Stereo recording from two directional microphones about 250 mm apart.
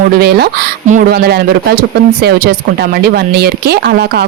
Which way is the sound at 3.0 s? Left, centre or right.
Right.